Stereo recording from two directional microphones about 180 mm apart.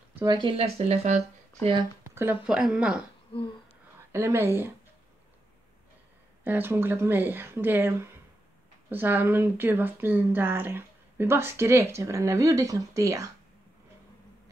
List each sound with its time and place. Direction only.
0.2 s speech: 25° right (ahead or behind)
2.0 s speech: 15° right (ahead or behind)
4.1 s speech: 15° right (ahead or behind)
6.4 s speech: 10° right (ahead or behind)